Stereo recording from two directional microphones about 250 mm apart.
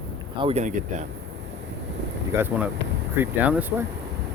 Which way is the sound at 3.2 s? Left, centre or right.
Centre.